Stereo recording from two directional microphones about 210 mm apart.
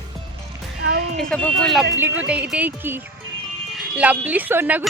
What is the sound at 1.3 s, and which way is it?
Speech, 5° left (ahead or behind).